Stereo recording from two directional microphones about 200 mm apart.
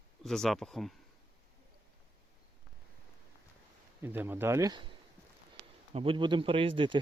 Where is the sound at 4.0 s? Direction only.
10° right (ahead or behind).